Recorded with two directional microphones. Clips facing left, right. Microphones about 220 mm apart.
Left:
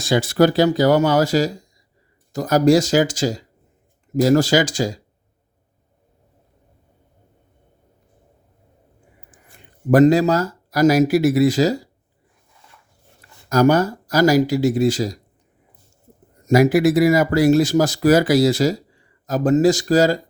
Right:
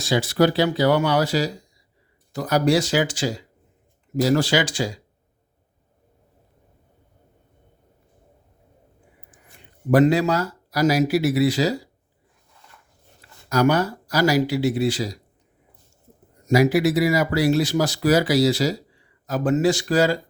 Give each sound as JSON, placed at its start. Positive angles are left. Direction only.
{"t": 0.0, "sound": "speech", "side_deg": 50}
{"t": 9.9, "sound": "speech", "side_deg": 40}
{"t": 13.5, "sound": "speech", "side_deg": 45}
{"t": 16.5, "sound": "speech", "side_deg": 50}